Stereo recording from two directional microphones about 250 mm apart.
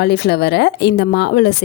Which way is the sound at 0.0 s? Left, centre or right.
Left.